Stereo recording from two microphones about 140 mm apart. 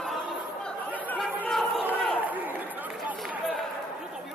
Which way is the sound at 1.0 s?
10° left (ahead or behind).